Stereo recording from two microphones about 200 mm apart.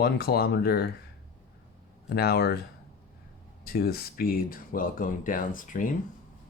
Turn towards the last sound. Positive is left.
turn(degrees=40)  # may be behind; listen again after turning